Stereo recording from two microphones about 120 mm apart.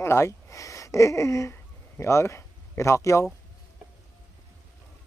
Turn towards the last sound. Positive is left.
turn(degrees=25)  # may be behind; listen again after turning